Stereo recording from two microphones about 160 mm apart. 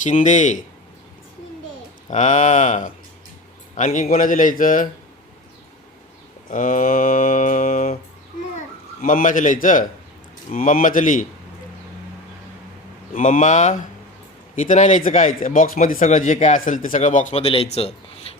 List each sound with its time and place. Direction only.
0.0 s speech: 50° left (ahead or behind)
2.0 s speech: 50° left (ahead or behind)
4.1 s mantra: 55° left (ahead or behind)
6.5 s mantra: 55° left (ahead or behind)
9.0 s mantra: 60° left (ahead or behind)
13.1 s speech: 50° left (ahead or behind)
17.4 s speech: 35° left (ahead or behind)